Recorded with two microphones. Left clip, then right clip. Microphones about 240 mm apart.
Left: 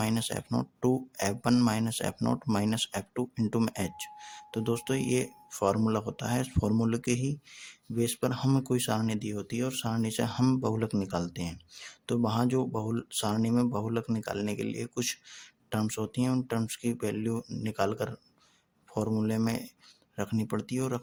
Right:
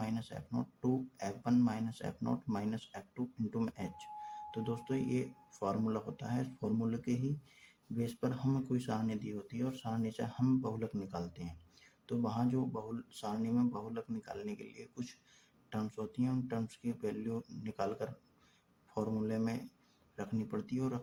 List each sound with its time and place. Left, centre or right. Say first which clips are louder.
0.0 s speech: left 10 dB; left